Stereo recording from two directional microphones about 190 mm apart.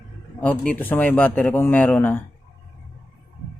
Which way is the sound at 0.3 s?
10° left (ahead or behind).